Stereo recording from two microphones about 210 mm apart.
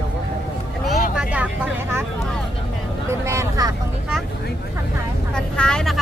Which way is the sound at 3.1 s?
15° right (ahead or behind).